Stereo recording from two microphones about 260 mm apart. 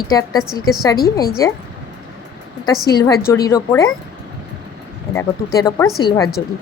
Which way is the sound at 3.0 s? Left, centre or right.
Centre.